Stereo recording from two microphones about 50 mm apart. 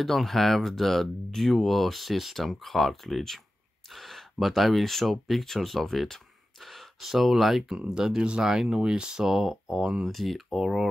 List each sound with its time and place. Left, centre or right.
0.0 s speech: centre
7.7 s speech: centre